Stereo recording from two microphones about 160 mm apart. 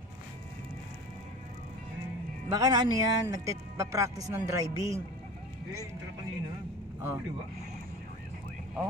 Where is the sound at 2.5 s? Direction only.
25° right (ahead or behind).